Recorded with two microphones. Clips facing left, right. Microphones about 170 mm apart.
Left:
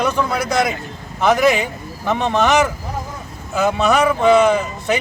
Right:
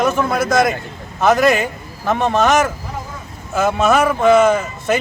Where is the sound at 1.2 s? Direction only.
Centre (ahead or behind).